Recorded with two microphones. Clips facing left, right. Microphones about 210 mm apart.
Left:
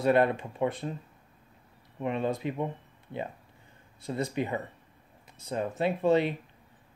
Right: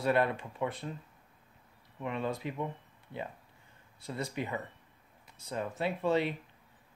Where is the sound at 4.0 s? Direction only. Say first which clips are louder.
Left 6 dB; 20° left (ahead or behind).